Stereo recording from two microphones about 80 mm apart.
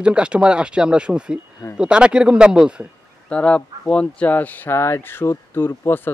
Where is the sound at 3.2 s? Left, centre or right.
Centre.